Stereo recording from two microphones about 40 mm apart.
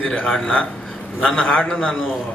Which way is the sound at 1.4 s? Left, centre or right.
Left.